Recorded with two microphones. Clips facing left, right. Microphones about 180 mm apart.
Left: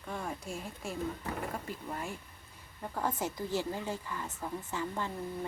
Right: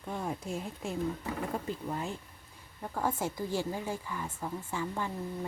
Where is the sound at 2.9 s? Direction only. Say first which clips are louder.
Right 2 dB; 10° right (ahead or behind).